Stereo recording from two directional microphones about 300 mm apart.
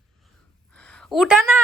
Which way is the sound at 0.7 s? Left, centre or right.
Centre.